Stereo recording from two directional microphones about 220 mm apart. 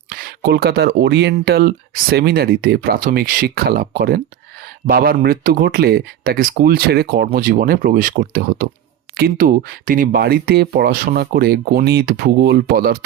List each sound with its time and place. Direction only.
0.1 s speech: 40° right (ahead or behind)